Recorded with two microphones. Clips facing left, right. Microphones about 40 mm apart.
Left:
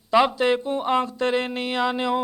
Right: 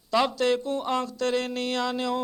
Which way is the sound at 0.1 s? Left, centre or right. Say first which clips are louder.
Left 4 dB; left.